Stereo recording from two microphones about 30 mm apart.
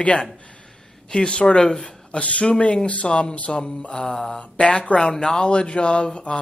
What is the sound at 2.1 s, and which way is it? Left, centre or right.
Speech, left.